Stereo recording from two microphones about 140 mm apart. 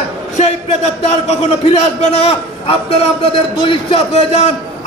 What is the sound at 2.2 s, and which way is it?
Speech, 45° left (ahead or behind).